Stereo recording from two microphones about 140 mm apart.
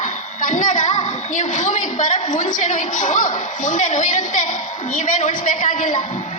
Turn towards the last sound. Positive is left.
turn(degrees=70)  # may be behind; listen again after turning